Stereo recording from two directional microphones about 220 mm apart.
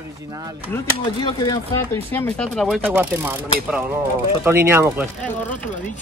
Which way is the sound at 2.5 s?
Centre (ahead or behind).